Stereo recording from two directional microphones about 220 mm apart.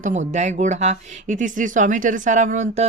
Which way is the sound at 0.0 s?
35° right (ahead or behind).